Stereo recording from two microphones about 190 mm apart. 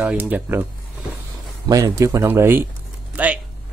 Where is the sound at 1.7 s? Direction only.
15° right (ahead or behind).